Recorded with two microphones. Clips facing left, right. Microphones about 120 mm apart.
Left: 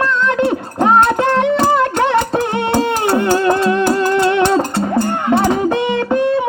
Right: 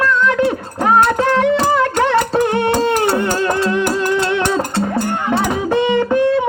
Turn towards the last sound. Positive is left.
turn(degrees=15)  # may be behind; listen again after turning